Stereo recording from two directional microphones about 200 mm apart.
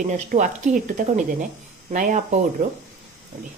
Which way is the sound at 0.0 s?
40° right (ahead or behind).